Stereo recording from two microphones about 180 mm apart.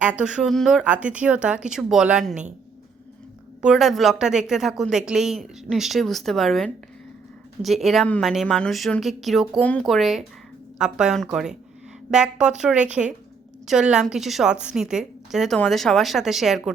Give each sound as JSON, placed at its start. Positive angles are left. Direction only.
{"t": 0.0, "sound": "speech", "side_deg": -5}
{"t": 3.6, "sound": "speech", "side_deg": 0}